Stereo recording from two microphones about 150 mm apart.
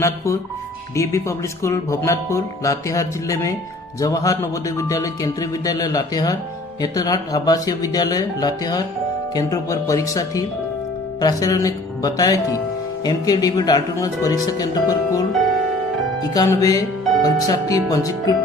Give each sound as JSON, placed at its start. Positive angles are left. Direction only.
{"t": 0.0, "sound": "speech", "side_deg": 20}
{"t": 16.3, "sound": "speech", "side_deg": 25}